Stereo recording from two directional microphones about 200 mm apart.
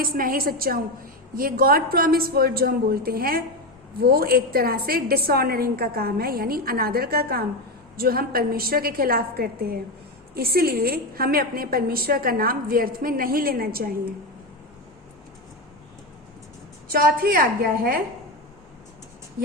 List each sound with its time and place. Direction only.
0.0 s a woman's voice: 45° right (ahead or behind)
16.9 s a woman's voice: 45° right (ahead or behind)